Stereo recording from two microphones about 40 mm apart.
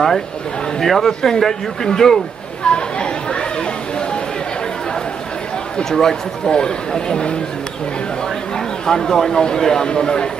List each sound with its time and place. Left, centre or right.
0.7 s a man's voice: centre
2.6 s chatter: left
5.9 s speech: centre
8.5 s speech: centre